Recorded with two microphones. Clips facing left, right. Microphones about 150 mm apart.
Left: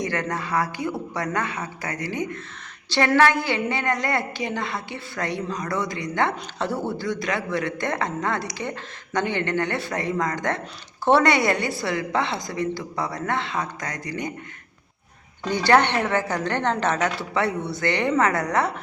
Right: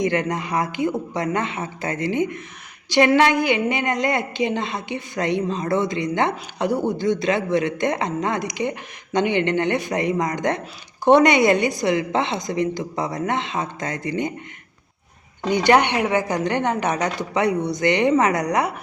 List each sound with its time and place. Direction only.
0.0 s a woman's voice: 20° right (ahead or behind)
15.4 s a woman's voice: 15° right (ahead or behind)